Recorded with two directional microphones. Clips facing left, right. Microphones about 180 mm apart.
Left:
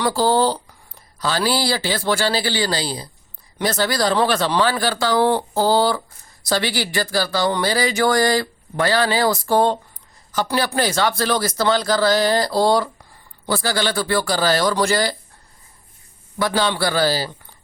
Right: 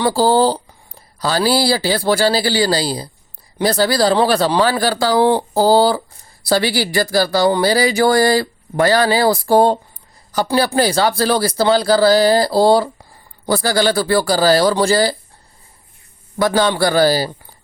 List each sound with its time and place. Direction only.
0.0 s speech: 30° right (ahead or behind)
16.4 s a man's voice: 45° right (ahead or behind)